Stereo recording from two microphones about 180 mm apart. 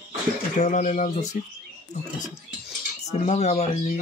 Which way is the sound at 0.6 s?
45° left (ahead or behind).